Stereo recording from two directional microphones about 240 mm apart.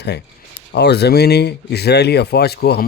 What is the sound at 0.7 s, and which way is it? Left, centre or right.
Speech, left.